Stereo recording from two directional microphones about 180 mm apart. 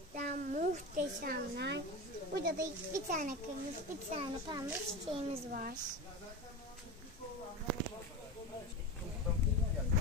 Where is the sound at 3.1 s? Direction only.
40° right (ahead or behind).